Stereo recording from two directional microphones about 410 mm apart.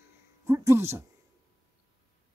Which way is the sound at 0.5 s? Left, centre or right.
Centre.